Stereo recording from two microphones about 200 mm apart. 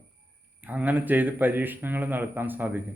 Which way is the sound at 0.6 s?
10° right (ahead or behind).